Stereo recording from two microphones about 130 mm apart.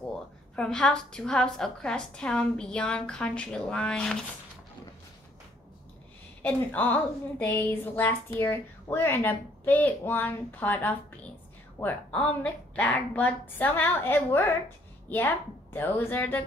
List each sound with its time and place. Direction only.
0.6 s a woman's voice: 5° left (ahead or behind)
6.4 s a woman's voice: 15° left (ahead or behind)